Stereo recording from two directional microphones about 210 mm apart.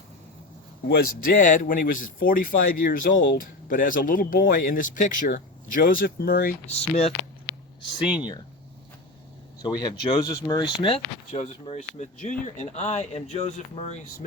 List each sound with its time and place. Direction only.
0.9 s speech: 45° left (ahead or behind)
6.7 s speech: 30° left (ahead or behind)
9.6 s speech: 20° left (ahead or behind)